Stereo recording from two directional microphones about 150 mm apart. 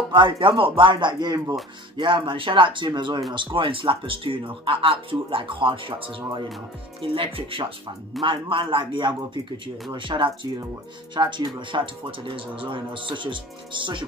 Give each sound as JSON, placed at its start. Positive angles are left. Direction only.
{"t": 0.1, "sound": "speech", "side_deg": -35}